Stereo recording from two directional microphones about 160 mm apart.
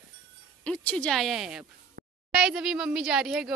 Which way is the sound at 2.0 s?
75° right (ahead or behind).